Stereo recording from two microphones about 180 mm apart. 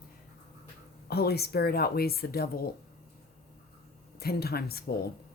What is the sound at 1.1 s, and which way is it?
Speech, 60° left (ahead or behind).